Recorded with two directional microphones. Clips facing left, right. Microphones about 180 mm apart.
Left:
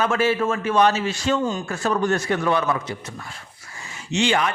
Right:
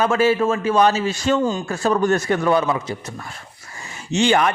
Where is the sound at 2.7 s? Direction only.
25° right (ahead or behind).